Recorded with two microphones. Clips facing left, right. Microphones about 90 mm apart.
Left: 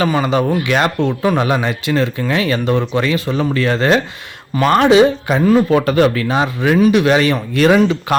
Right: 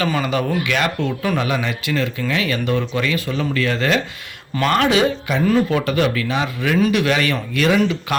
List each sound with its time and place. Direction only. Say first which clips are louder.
0.0 s speech: left 5 dB; 25° left (ahead or behind)
1.4 s speech: left 5 dB; 35° left (ahead or behind)